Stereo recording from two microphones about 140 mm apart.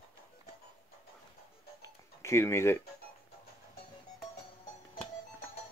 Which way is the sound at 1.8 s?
20° left (ahead or behind).